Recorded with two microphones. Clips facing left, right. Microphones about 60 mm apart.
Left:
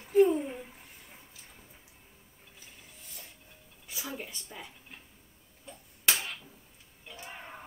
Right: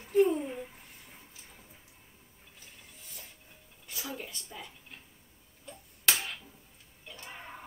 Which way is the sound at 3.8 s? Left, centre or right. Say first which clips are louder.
Even; centre.